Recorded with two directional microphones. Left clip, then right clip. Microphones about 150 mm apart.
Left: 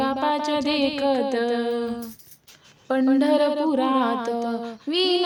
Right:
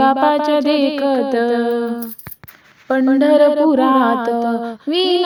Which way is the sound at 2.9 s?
25° right (ahead or behind).